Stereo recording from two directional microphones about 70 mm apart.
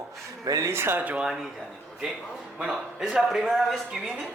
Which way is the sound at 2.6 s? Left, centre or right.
Centre.